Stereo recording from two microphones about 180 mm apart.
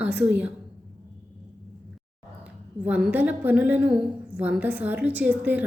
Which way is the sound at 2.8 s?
5° right (ahead or behind).